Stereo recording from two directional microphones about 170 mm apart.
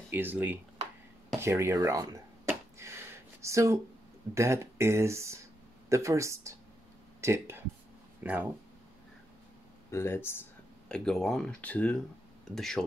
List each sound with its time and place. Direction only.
0.1 s speech: 10° right (ahead or behind)
1.4 s a sound: 15° right (ahead or behind)
4.3 s speech: 15° right (ahead or behind)
9.8 s speech: 15° left (ahead or behind)
10.9 s speech: centre (ahead or behind)